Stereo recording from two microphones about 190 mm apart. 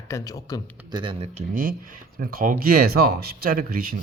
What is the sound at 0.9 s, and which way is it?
Speech, 25° right (ahead or behind).